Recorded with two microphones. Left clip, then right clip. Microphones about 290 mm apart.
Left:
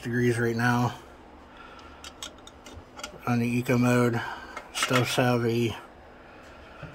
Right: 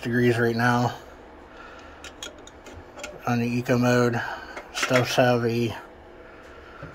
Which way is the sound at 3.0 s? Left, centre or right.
Centre.